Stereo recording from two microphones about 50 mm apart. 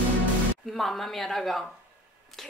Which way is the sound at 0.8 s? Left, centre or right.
Centre.